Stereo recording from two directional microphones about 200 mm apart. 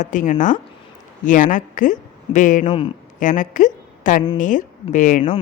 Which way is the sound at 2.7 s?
25° left (ahead or behind).